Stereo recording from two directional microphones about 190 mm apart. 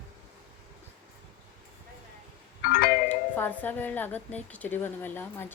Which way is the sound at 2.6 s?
50° left (ahead or behind).